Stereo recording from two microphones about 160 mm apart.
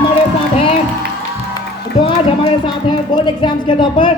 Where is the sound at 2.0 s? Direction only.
35° left (ahead or behind).